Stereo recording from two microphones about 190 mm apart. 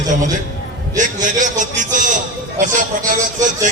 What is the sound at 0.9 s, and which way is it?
A man's voice, 40° right (ahead or behind).